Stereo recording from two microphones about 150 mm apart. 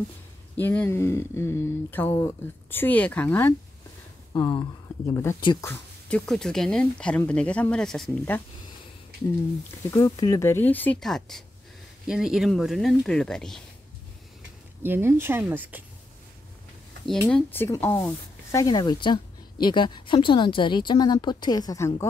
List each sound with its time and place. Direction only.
0.6 s speech: 15° left (ahead or behind)
4.3 s speech: 25° left (ahead or behind)
5.1 s speech: 15° left (ahead or behind)
9.8 s speech: 20° left (ahead or behind); by 13.6 s 5° left (ahead or behind)
14.8 s speech: 15° right (ahead or behind)
17.3 s a woman's voice: 15° left (ahead or behind)